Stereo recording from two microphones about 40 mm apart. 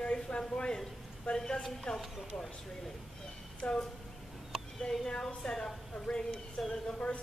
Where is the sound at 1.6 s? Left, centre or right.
Centre.